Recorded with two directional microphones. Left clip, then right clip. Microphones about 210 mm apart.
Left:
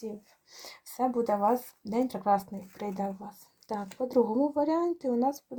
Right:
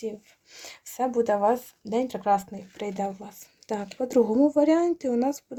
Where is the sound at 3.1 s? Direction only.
30° right (ahead or behind).